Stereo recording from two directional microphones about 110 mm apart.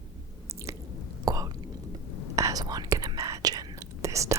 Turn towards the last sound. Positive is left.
turn(degrees=-30)  # may be behind; listen again after turning